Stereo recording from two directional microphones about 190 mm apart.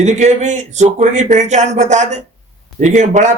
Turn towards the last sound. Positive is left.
turn(degrees=-40)  # may be behind; listen again after turning